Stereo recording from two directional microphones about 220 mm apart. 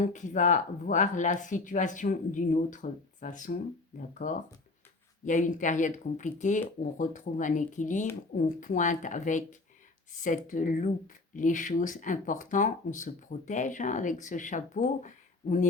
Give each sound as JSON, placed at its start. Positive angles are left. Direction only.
{"t": 0.0, "sound": "speech", "side_deg": 35}
{"t": 5.2, "sound": "speech", "side_deg": 35}